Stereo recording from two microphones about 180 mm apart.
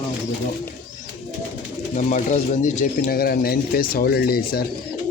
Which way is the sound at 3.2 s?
55° left (ahead or behind).